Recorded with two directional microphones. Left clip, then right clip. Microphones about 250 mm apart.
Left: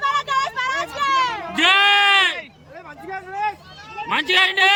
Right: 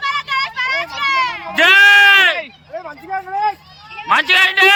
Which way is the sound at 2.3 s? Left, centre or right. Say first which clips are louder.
Right 8 dB; right.